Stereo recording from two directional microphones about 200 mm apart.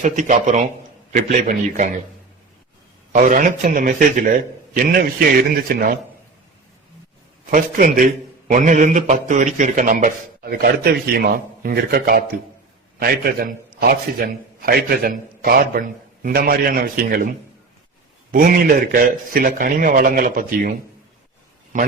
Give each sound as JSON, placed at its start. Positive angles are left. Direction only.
{"t": 0.0, "sound": "a man's voice", "side_deg": -40}
{"t": 3.1, "sound": "a man's voice", "side_deg": -40}
{"t": 7.5, "sound": "a man's voice", "side_deg": -45}
{"t": 18.9, "sound": "a man's voice", "side_deg": -45}
{"t": 21.7, "sound": "a man's voice", "side_deg": -40}